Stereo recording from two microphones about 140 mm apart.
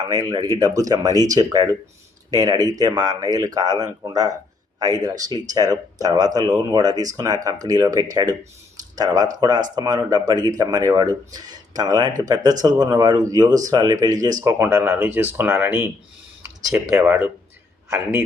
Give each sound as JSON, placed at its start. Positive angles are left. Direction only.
{"t": 0.0, "sound": "speech", "side_deg": -25}
{"t": 9.7, "sound": "speech", "side_deg": -25}
{"t": 16.9, "sound": "speech", "side_deg": -20}